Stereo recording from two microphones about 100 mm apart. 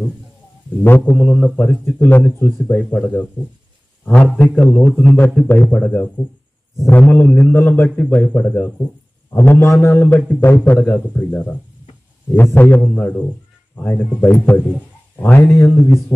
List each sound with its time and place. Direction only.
0.8 s a man's voice: 20° left (ahead or behind)